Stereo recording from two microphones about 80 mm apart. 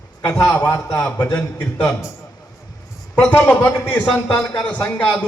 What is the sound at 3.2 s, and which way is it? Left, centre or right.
A man's voice, centre.